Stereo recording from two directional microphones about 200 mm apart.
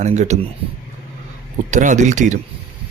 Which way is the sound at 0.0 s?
35° right (ahead or behind).